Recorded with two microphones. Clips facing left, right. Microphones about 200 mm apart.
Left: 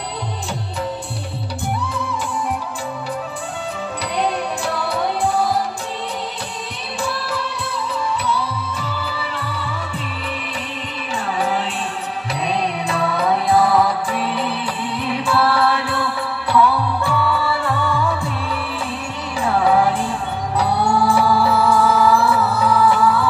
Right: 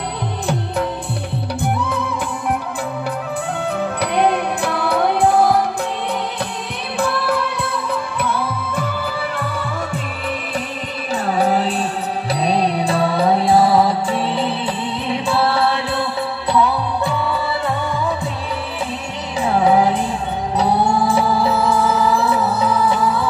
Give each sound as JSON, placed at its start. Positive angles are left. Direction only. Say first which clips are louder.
{"t": 1.6, "sound": "music", "louder": "right 3 dB", "side_deg": -60}
{"t": 4.0, "sound": "music", "louder": "right 4 dB", "side_deg": -60}
{"t": 7.0, "sound": "music", "louder": "right 6 dB", "side_deg": -60}
{"t": 11.1, "sound": "music", "louder": "right 4 dB", "side_deg": -40}
{"t": 19.4, "sound": "music", "louder": "right 2 dB", "side_deg": -20}